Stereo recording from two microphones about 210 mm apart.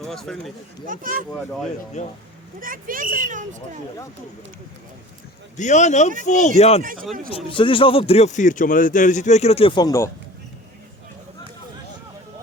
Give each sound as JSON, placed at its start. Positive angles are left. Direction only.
{"t": 0.0, "sound": "speech", "side_deg": 0}
{"t": 0.9, "sound": "speech", "side_deg": -40}
{"t": 1.3, "sound": "speech", "side_deg": 5}
{"t": 2.0, "sound": "speech", "side_deg": 35}
{"t": 2.6, "sound": "speech", "side_deg": -40}
{"t": 5.5, "sound": "a man's voice", "side_deg": 35}